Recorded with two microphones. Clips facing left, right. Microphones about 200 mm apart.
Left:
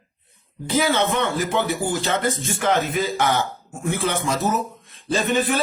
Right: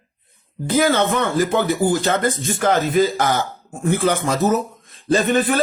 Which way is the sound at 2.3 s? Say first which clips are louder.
Right 3 dB; 35° right (ahead or behind).